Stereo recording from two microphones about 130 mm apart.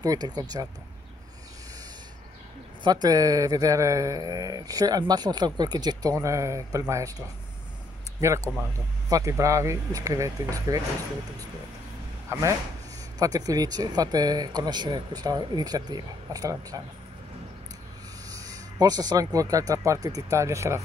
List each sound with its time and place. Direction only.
0.0 s speech: 30° right (ahead or behind)
2.8 s speech: 30° right (ahead or behind)
9.1 s speech: 25° right (ahead or behind)
12.3 s speech: 25° right (ahead or behind)
18.3 s speech: 25° right (ahead or behind)